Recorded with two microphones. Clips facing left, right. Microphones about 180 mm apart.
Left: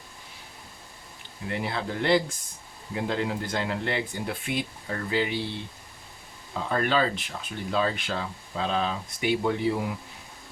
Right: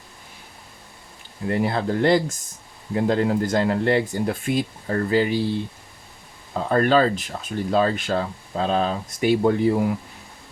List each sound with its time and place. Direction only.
1.5 s speech: 45° right (ahead or behind)
6.5 s speech: 45° right (ahead or behind)